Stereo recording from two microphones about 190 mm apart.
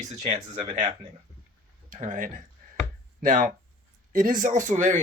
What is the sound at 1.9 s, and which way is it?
Speech, 45° right (ahead or behind).